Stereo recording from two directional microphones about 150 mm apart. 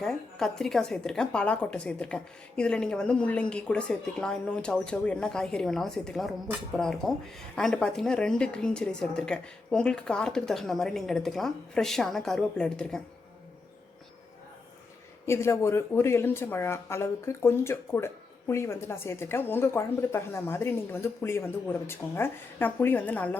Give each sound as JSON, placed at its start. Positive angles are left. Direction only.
{"t": 0.0, "sound": "speech", "side_deg": 5}
{"t": 15.3, "sound": "speech", "side_deg": 15}